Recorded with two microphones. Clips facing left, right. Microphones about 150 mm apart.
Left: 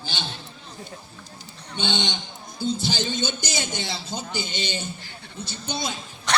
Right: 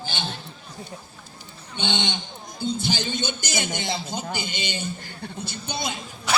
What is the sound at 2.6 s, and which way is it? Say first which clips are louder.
Speech: even; 15° right (ahead or behind).